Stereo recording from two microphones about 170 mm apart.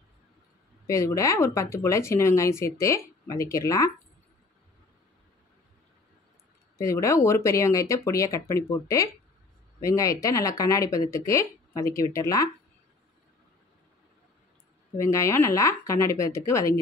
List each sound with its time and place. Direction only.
0.8 s speech: 20° left (ahead or behind)
6.8 s speech: 15° left (ahead or behind)
15.0 s speech: 15° left (ahead or behind)